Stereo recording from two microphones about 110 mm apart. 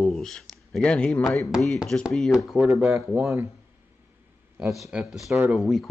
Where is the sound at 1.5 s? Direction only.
Centre (ahead or behind).